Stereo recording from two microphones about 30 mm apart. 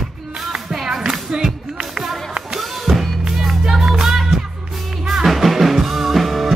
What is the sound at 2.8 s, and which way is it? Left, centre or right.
Music, centre.